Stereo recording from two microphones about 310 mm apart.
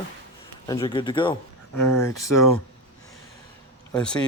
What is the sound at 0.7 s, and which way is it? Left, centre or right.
Speech, centre.